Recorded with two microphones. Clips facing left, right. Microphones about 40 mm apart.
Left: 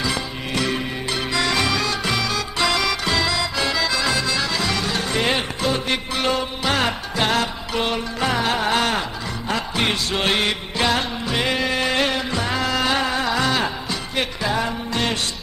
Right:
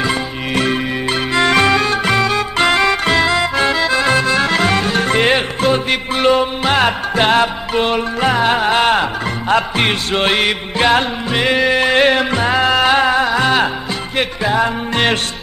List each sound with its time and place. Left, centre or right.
0.0 s music: right